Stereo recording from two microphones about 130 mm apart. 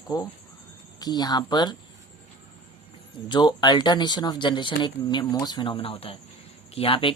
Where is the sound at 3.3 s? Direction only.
35° left (ahead or behind).